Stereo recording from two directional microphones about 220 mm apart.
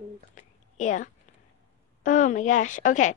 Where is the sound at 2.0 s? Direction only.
35° left (ahead or behind).